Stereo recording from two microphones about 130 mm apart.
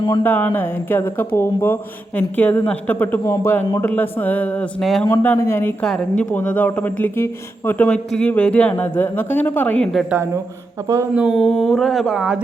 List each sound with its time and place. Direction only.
0.1 s speech: 15° left (ahead or behind)
4.8 s mantra: centre (ahead or behind)
5.2 s speech: 15° left (ahead or behind)
10.1 s speech: 15° right (ahead or behind)
11.3 s mantra: 5° left (ahead or behind)